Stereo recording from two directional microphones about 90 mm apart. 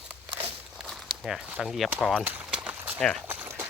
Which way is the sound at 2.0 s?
10° left (ahead or behind).